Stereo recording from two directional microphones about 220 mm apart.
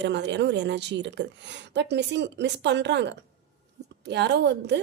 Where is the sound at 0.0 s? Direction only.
50° right (ahead or behind).